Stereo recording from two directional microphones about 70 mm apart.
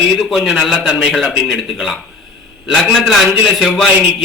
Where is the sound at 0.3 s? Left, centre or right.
Centre.